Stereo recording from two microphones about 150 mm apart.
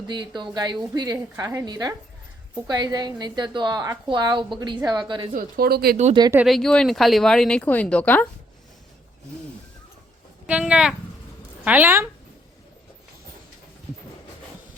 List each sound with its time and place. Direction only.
0.1 s a woman's voice: 30° right (ahead or behind)
5.3 s speech: 75° right (ahead or behind)
6.4 s speech: centre (ahead or behind)
10.4 s speech: 5° right (ahead or behind)